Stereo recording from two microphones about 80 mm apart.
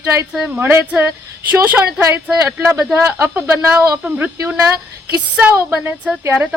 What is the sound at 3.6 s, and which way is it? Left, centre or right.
Speech, right.